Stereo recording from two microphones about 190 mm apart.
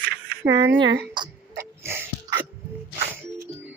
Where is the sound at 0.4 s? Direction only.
25° right (ahead or behind).